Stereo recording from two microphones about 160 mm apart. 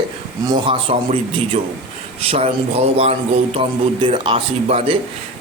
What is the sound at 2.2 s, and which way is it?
Speech, 40° right (ahead or behind).